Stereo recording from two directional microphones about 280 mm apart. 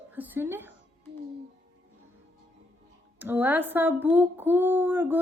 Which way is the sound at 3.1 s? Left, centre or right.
Centre.